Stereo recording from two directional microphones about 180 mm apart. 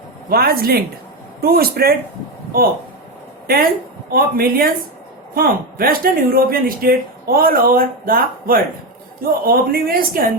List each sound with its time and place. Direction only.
0.3 s a woman's voice: 55° right (ahead or behind)
3.4 s a woman's voice: 55° right (ahead or behind)